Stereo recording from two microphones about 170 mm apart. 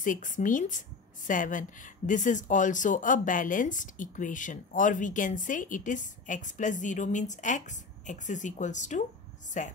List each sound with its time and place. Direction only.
0.0 s speech: 50° left (ahead or behind)